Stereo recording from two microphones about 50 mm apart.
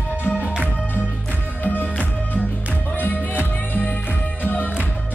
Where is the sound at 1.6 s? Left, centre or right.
Left.